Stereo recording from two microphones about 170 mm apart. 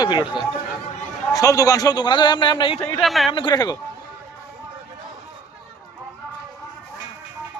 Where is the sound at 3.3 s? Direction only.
30° left (ahead or behind).